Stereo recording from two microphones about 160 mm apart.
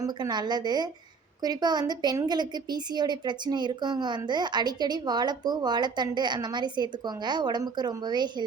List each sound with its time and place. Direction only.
0.0 s a woman's voice: 25° right (ahead or behind)